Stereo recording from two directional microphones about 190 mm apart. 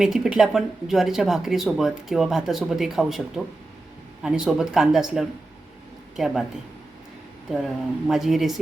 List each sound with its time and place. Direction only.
0.0 s speech: 5° right (ahead or behind)
7.5 s speech: centre (ahead or behind)